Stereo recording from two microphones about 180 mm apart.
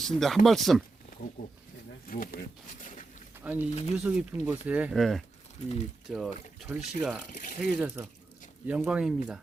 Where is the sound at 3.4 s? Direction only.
10° right (ahead or behind).